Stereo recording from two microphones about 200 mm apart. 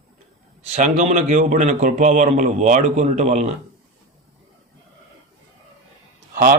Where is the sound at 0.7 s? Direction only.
35° right (ahead or behind).